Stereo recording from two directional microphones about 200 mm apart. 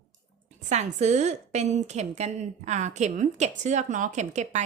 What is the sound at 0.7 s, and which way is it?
A woman's voice, 35° right (ahead or behind).